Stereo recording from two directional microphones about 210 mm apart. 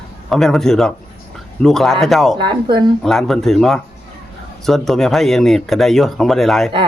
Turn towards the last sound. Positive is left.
turn(degrees=0)  # may be behind; listen again after turning